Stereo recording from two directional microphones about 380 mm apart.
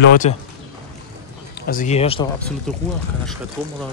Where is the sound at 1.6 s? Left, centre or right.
Centre.